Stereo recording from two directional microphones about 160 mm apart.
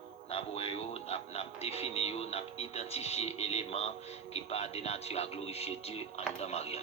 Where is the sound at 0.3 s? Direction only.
35° left (ahead or behind).